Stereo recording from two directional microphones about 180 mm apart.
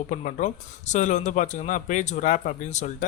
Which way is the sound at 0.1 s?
40° left (ahead or behind).